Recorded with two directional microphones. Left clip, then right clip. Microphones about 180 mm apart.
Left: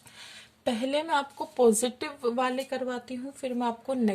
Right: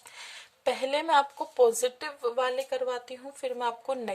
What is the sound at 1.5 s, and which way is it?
Speech, 5° left (ahead or behind).